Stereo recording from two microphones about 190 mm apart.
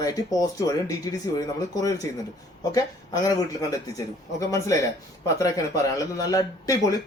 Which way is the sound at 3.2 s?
20° left (ahead or behind).